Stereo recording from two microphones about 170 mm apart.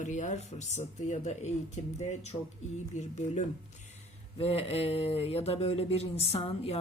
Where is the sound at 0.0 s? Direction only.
45° left (ahead or behind).